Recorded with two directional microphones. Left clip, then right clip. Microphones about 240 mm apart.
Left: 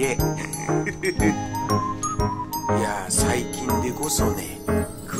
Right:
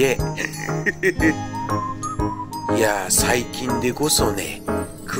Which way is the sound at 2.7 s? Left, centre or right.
Centre.